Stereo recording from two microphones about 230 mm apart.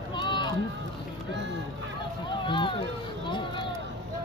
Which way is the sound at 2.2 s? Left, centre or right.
Left.